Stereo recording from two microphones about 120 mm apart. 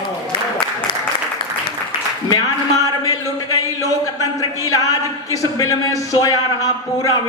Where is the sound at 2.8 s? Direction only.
30° left (ahead or behind).